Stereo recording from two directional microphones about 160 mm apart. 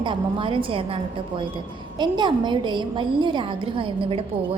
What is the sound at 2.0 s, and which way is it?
A woman's voice, 30° right (ahead or behind).